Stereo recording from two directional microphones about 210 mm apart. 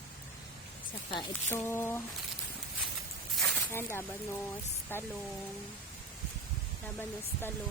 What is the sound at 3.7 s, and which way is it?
Speech, 10° left (ahead or behind).